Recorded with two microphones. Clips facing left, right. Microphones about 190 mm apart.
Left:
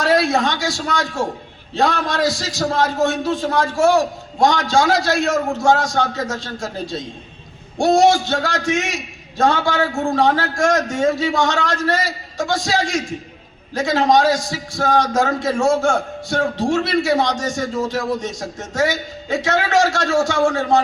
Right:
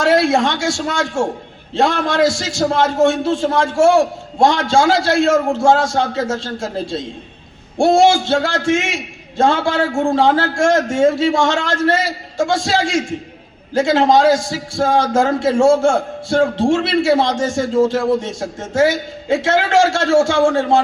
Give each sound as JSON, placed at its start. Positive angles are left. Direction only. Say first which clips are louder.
{"t": 0.0, "sound": "a man's voice", "louder": "right 3 dB", "side_deg": -25}